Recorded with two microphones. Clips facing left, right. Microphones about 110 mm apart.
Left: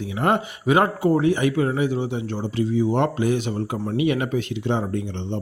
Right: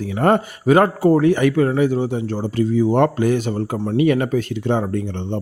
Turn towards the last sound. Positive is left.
turn(degrees=-50)  # may be behind; listen again after turning